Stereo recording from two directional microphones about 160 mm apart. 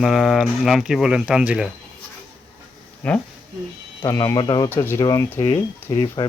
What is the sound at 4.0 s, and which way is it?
Speech, 20° left (ahead or behind).